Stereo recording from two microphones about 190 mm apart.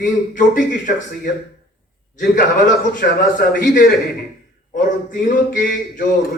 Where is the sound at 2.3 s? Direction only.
45° left (ahead or behind).